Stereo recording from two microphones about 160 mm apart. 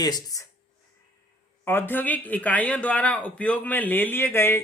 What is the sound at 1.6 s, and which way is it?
A man's voice, 15° left (ahead or behind).